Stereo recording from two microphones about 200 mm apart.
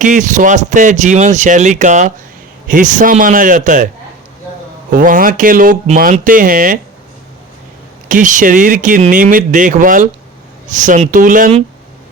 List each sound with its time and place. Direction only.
0.0 s speech: 40° right (ahead or behind)
4.9 s speech: 45° right (ahead or behind)
8.0 s speech: 40° right (ahead or behind)